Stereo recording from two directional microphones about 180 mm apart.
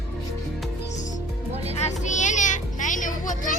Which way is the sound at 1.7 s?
40° left (ahead or behind).